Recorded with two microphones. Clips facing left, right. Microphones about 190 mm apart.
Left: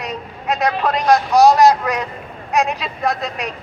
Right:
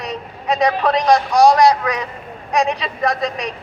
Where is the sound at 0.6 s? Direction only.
5° left (ahead or behind).